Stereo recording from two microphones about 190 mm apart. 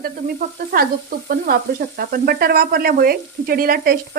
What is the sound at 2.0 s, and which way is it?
A woman's voice, 50° right (ahead or behind).